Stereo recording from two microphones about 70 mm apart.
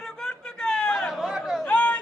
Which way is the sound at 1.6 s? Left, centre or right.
Centre.